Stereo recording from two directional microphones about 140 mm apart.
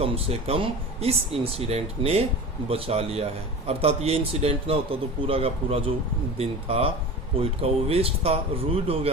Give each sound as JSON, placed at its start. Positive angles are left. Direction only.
{"t": 0.0, "sound": "speech", "side_deg": -45}